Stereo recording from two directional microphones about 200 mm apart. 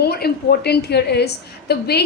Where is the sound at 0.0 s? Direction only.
50° left (ahead or behind).